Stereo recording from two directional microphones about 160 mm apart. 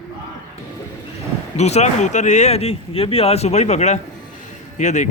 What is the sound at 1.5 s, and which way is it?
Speech, 45° left (ahead or behind).